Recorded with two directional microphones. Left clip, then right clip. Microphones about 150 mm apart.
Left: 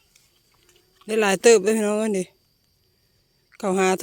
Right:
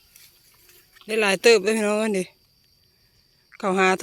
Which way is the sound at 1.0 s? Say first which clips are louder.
Left 1 dB; 55° left (ahead or behind).